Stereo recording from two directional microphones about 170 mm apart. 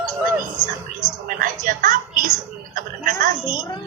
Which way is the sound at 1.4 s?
50° right (ahead or behind).